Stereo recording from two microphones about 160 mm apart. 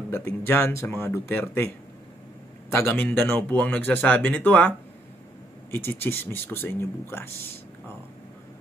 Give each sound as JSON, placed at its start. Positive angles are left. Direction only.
{"t": 0.1, "sound": "speech", "side_deg": 15}
{"t": 2.7, "sound": "speech", "side_deg": 15}
{"t": 5.9, "sound": "speech", "side_deg": 15}